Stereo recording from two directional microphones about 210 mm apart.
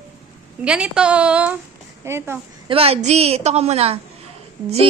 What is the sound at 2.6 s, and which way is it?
A woman's voice, 25° right (ahead or behind).